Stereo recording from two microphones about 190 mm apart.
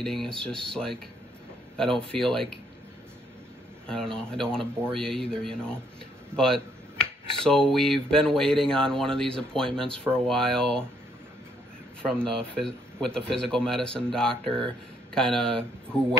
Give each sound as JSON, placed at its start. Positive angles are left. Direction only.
{"t": 0.0, "sound": "speech", "side_deg": 5}
{"t": 3.8, "sound": "speech", "side_deg": 5}
{"t": 12.2, "sound": "speech", "side_deg": 5}